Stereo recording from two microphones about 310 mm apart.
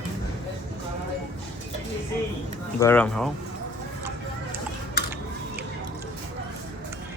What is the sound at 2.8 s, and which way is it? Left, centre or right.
Speech, centre.